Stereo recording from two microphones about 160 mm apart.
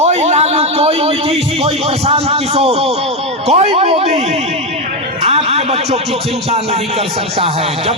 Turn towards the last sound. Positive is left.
turn(degrees=-40)  # may be behind; listen again after turning